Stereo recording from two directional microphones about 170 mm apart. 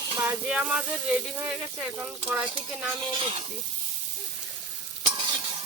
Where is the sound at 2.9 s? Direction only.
30° right (ahead or behind).